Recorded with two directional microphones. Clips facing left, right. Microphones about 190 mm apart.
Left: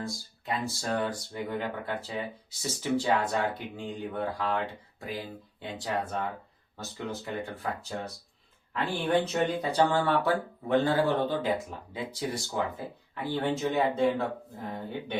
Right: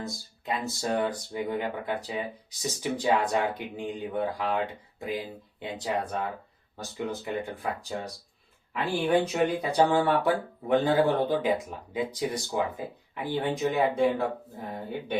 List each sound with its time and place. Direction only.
0.0 s speech: 20° right (ahead or behind)
7.3 s speech: 15° right (ahead or behind)